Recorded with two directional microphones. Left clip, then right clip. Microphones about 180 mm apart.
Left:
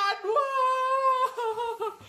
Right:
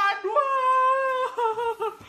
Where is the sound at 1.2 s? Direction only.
30° left (ahead or behind).